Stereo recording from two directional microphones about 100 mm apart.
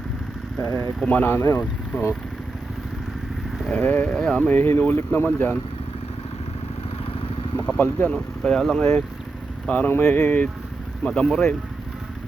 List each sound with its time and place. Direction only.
1.0 s speech: 15° left (ahead or behind)
3.6 s speech: 10° left (ahead or behind)
4.4 s speech: 20° left (ahead or behind)
7.5 s speech: 15° left (ahead or behind)